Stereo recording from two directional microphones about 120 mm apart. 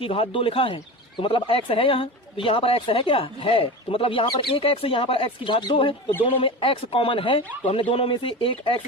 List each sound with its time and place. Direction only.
0.0 s speech: 50° left (ahead or behind)